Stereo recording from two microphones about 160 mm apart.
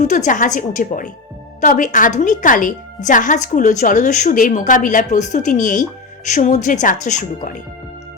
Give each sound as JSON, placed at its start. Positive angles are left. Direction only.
{"t": 0.0, "sound": "speech", "side_deg": 50}